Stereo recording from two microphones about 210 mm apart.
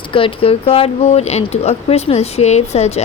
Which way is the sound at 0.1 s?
25° left (ahead or behind).